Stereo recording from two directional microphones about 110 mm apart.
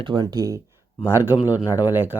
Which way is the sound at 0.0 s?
45° right (ahead or behind).